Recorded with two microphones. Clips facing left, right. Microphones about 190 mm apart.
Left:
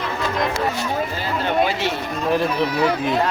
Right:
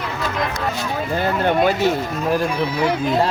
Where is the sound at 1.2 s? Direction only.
55° right (ahead or behind).